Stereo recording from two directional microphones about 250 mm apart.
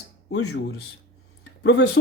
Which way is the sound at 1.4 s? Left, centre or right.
Left.